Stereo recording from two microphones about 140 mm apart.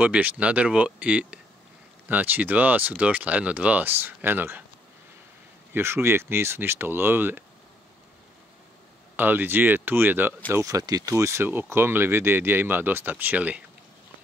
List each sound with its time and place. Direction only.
0.0 s speech: 10° right (ahead or behind)
5.7 s speech: 15° right (ahead or behind)
9.1 s speech: 15° right (ahead or behind)